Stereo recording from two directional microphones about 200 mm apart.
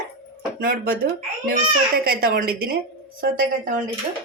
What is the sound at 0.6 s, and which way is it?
Speech, 45° right (ahead or behind).